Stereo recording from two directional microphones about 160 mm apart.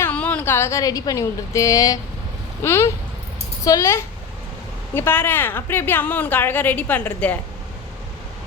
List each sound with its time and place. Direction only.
0.0 s a woman's voice: 10° left (ahead or behind)